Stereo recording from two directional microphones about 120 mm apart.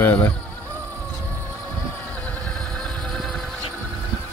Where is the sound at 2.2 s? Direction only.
10° left (ahead or behind).